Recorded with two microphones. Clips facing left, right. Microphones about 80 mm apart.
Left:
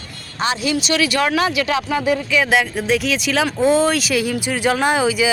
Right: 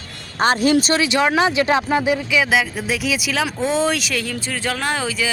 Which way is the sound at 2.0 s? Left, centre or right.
Centre.